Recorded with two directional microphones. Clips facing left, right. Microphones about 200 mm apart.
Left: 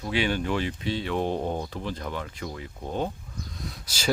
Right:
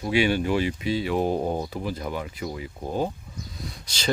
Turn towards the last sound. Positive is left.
turn(degrees=5)  # may be behind; listen again after turning